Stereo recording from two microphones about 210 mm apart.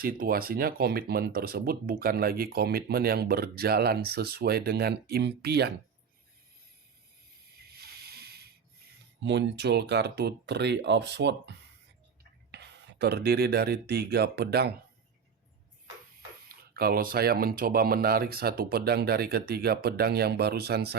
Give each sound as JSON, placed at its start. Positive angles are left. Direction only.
{"t": 0.0, "sound": "speech", "side_deg": -45}
{"t": 7.7, "sound": "a sound", "side_deg": -50}
{"t": 9.2, "sound": "speech", "side_deg": -55}
{"t": 16.5, "sound": "speech", "side_deg": -45}